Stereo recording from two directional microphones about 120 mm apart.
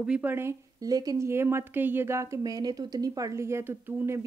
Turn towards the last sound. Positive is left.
turn(degrees=-20)  # may be behind; listen again after turning